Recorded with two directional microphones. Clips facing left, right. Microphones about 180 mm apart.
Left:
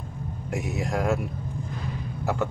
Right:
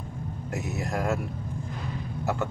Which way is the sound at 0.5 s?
15° left (ahead or behind).